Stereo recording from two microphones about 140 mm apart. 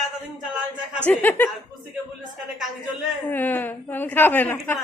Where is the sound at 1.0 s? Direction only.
15° left (ahead or behind).